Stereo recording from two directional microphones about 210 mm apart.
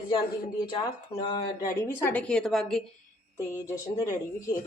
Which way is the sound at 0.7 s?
20° left (ahead or behind).